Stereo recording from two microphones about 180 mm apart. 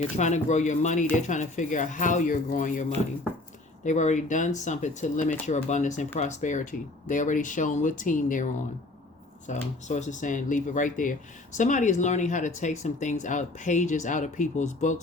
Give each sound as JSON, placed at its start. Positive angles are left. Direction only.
{"t": 0.2, "sound": "speech", "side_deg": 40}
{"t": 3.8, "sound": "speech", "side_deg": 40}
{"t": 9.5, "sound": "speech", "side_deg": 40}